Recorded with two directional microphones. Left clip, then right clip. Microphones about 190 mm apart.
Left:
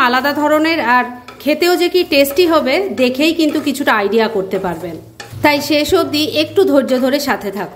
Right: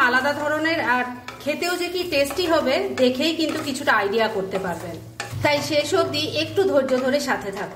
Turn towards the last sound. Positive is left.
turn(degrees=50)  # may be behind; listen again after turning